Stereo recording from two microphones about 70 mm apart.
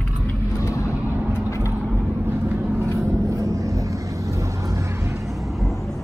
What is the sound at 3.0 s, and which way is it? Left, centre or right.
Vehicle, right.